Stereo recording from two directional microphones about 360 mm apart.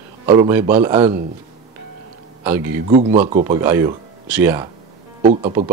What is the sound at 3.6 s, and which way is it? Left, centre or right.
Speech, centre.